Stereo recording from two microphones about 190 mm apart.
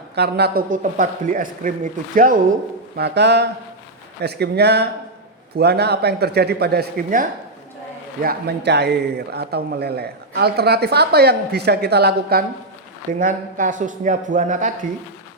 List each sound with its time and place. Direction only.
0.2 s speech: 60° right (ahead or behind)
0.7 s speech: 45° right (ahead or behind)
3.0 s speech: 65° right (ahead or behind)
13.1 s speech: 45° right (ahead or behind)